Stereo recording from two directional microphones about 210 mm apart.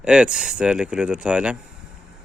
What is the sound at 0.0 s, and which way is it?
Speech, 5° right (ahead or behind).